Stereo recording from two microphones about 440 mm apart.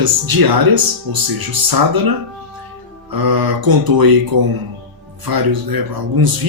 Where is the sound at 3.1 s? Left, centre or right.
Right.